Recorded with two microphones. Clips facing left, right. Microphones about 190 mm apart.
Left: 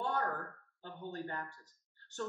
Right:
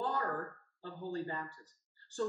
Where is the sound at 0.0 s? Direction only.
20° right (ahead or behind).